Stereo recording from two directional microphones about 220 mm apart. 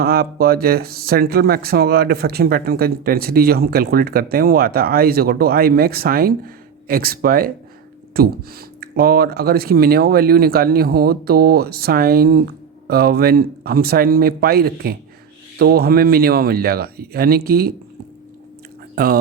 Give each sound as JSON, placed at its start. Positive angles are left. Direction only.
{"t": 0.0, "sound": "speech", "side_deg": -45}